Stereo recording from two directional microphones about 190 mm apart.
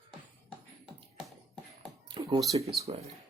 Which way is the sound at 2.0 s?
25° right (ahead or behind).